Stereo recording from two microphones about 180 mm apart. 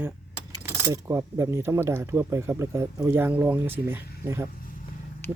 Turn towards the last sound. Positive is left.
turn(degrees=-10)  # may be behind; listen again after turning